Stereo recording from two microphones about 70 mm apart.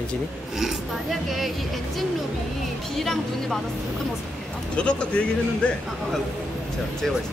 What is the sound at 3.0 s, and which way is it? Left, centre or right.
Speech, centre.